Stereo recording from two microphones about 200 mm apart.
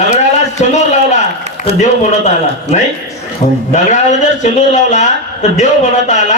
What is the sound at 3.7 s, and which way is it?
A man's voice, 35° left (ahead or behind).